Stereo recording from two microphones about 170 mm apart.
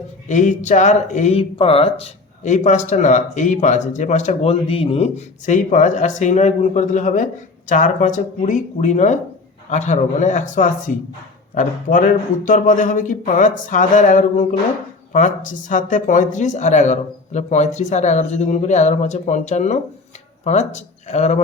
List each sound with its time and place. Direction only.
0.3 s speech: 45° left (ahead or behind)